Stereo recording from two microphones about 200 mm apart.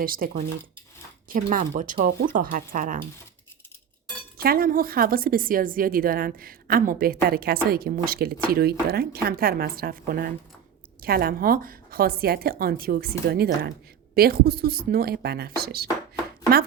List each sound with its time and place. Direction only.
0.0 s a woman's voice: 45° right (ahead or behind)
4.4 s a woman's voice: 45° right (ahead or behind)